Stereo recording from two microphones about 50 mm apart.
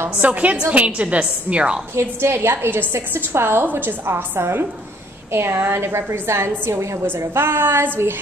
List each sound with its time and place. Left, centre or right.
0.2 s a woman's voice: right
2.0 s a woman's voice: right